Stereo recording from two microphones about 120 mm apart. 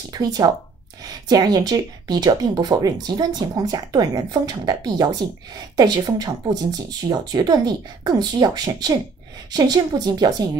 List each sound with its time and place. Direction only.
0.1 s speech: 35° right (ahead or behind)